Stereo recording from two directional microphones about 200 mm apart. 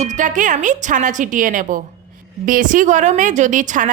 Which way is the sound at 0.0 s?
40° right (ahead or behind).